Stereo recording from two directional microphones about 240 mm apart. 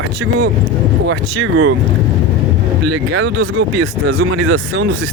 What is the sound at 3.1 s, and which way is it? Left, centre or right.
Speech, right.